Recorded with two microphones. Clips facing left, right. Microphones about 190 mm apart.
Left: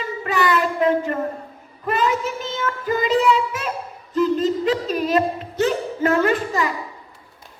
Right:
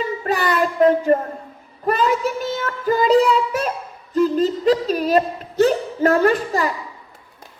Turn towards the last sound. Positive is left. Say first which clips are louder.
# right 2 dB
turn(degrees=-40)  # may be behind; listen again after turning